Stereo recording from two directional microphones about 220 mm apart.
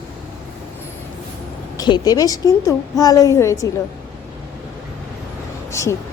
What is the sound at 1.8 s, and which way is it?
A woman's voice, 15° left (ahead or behind).